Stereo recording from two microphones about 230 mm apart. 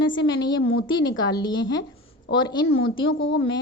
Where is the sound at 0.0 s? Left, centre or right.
Left.